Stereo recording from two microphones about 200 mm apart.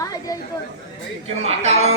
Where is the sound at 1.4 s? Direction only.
30° right (ahead or behind).